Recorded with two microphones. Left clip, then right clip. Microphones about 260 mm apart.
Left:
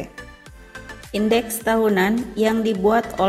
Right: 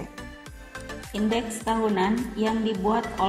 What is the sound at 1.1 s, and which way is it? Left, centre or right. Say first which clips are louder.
A woman's voice: left 8 dB; left.